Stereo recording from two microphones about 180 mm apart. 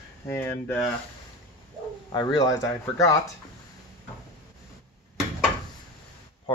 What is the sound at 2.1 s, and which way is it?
Speech, 20° left (ahead or behind).